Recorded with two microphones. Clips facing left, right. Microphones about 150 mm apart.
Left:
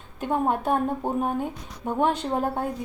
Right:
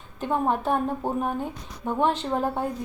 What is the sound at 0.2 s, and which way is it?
A woman's voice, 10° left (ahead or behind).